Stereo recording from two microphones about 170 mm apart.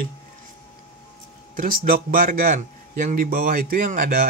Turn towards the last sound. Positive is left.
turn(degrees=-50)  # may be behind; listen again after turning